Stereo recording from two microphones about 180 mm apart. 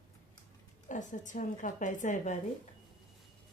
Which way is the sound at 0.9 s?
45° left (ahead or behind).